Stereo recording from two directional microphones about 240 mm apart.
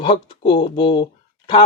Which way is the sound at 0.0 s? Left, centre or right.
Left.